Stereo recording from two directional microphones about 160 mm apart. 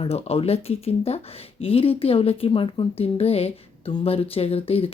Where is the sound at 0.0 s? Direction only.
40° left (ahead or behind).